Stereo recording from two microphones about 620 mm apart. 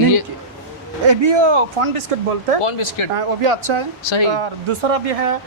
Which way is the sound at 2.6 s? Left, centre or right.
Left.